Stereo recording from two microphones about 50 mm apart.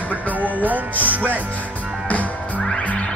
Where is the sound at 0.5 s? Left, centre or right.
Right.